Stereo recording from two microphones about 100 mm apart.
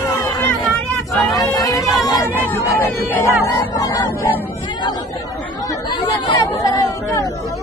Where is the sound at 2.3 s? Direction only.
20° left (ahead or behind).